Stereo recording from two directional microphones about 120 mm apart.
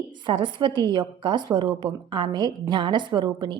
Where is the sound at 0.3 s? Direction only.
40° right (ahead or behind).